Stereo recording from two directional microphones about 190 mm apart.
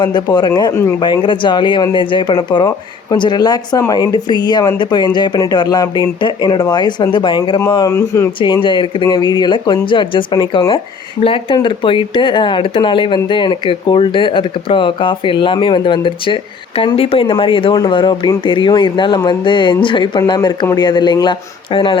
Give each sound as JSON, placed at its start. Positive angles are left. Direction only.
{"t": 0.0, "sound": "speech", "side_deg": 25}
{"t": 1.0, "sound": "speech", "side_deg": 25}
{"t": 8.6, "sound": "speech", "side_deg": 25}